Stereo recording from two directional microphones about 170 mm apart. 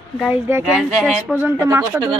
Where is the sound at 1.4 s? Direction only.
15° right (ahead or behind).